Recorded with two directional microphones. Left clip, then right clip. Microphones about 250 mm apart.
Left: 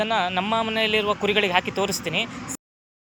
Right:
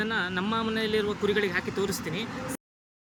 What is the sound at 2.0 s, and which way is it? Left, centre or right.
Speech, centre.